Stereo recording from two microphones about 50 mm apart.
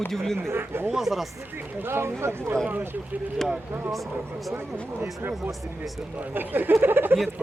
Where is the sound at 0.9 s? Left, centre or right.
Centre.